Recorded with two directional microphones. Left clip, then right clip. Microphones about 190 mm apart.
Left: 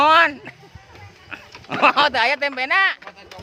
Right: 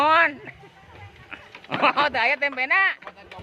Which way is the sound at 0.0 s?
20° left (ahead or behind).